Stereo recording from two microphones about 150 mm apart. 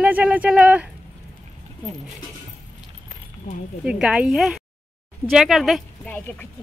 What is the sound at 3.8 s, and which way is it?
Speech, 5° right (ahead or behind).